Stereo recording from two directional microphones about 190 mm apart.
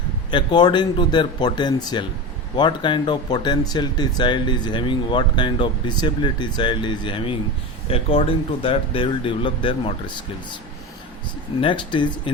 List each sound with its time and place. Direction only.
0.3 s speech: 25° left (ahead or behind)
11.6 s speech: 25° left (ahead or behind)